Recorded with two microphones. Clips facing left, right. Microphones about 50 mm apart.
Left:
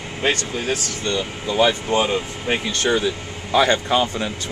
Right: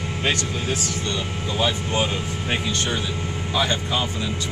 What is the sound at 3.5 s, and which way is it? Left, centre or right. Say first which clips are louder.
Speech: left 7 dB; left.